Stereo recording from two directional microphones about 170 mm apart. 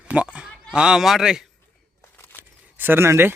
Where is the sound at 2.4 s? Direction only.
10° right (ahead or behind).